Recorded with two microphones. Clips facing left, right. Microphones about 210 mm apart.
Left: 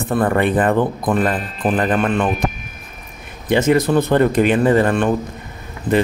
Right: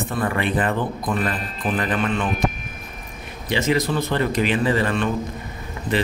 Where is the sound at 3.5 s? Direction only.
50° left (ahead or behind).